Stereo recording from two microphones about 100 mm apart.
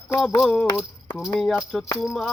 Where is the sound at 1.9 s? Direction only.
Centre (ahead or behind).